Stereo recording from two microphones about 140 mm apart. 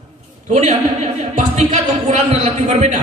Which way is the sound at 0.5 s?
55° right (ahead or behind).